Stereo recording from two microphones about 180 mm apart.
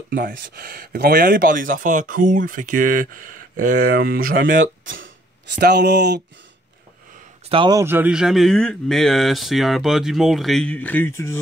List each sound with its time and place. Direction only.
0.1 s speech: 55° right (ahead or behind)
4.6 s speech: 90° right; by 6.2 s 70° right (ahead or behind)
7.4 s speech: 25° right (ahead or behind)
7.8 s speech: 10° right (ahead or behind); by 11.3 s 15° left (ahead or behind)